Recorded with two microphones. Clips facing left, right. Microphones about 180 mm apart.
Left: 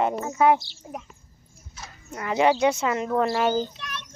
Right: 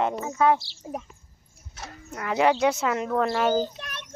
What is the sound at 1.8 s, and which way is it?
Horse, 65° right (ahead or behind).